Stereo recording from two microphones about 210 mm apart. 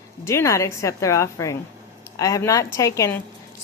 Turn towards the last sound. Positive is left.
turn(degrees=15)  # may be behind; listen again after turning